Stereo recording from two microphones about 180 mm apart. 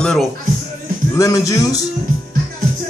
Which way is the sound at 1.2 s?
20° left (ahead or behind).